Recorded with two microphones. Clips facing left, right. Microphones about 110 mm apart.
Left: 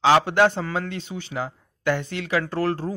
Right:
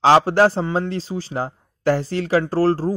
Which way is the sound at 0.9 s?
35° right (ahead or behind).